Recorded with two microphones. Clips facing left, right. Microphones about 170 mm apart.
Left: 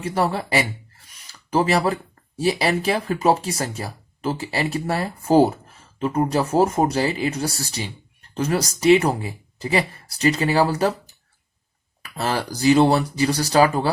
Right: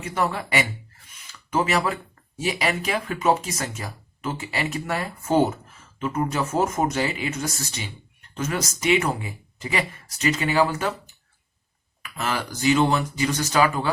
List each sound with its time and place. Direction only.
0.0 s speech: 30° left (ahead or behind)